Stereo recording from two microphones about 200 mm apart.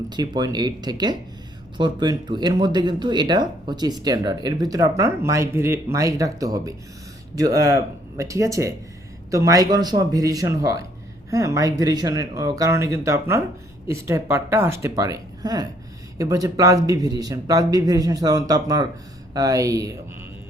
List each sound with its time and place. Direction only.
0.1 s speech: 20° right (ahead or behind)